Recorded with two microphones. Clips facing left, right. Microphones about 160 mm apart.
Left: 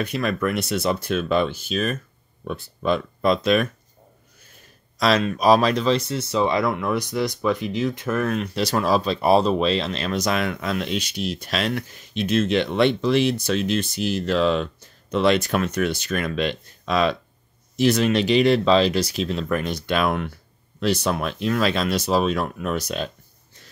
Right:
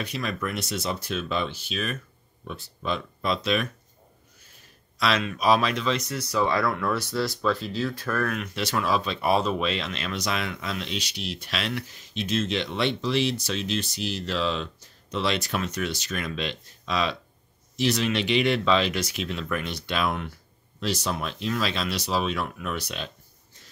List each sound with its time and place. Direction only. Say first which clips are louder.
0.0 s speech: left 7 dB; 55° left (ahead or behind)
2.4 s speech: left 8 dB; 55° left (ahead or behind)
4.9 s speech: left 6 dB; 40° left (ahead or behind); by 8.4 s 20° left (ahead or behind)
8.4 s speech: left 5 dB; 35° left (ahead or behind)